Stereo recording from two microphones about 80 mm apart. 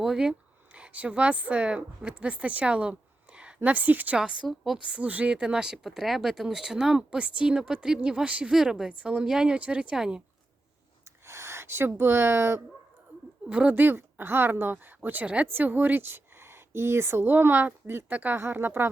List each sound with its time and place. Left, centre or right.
0.0 s speech: centre
4.2 s a woman's voice: centre
4.9 s speech: centre
8.9 s speech: centre
11.0 s a sound: right
13.5 s speech: centre